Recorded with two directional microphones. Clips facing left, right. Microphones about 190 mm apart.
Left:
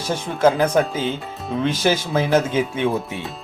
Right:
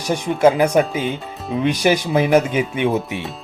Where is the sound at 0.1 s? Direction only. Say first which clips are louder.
Right 3 dB; 10° right (ahead or behind).